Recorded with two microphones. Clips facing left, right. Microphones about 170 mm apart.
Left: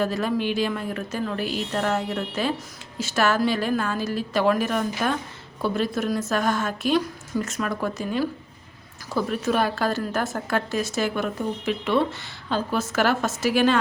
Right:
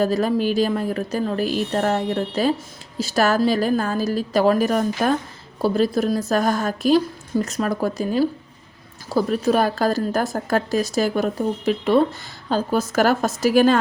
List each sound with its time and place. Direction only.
0.0 s a woman's voice: 40° right (ahead or behind)